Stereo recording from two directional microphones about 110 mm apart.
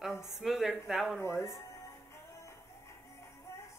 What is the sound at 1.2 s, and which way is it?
Speech, 25° left (ahead or behind).